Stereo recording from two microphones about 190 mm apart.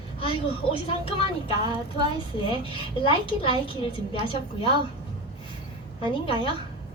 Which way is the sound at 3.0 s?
30° left (ahead or behind).